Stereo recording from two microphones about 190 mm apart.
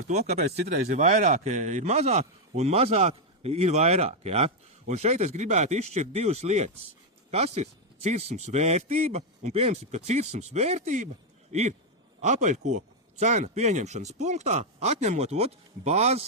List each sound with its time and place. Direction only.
0.1 s a man's voice: 35° right (ahead or behind)